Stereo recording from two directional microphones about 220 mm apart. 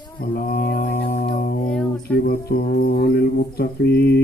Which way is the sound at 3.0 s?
45° left (ahead or behind).